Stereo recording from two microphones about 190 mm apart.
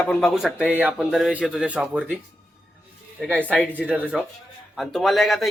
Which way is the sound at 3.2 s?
10° right (ahead or behind).